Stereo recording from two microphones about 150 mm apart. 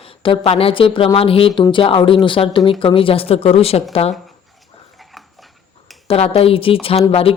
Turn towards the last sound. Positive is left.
turn(degrees=40)  # may be behind; listen again after turning